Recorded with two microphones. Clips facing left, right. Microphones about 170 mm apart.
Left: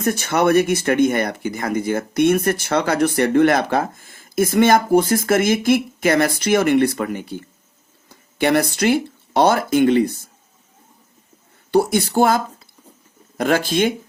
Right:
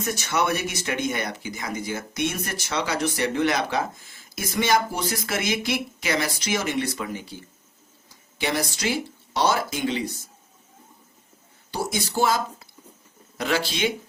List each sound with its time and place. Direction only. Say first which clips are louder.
0.0 s speech: left 7 dB; 55° left (ahead or behind)
11.7 s speech: left 11 dB; 60° left (ahead or behind)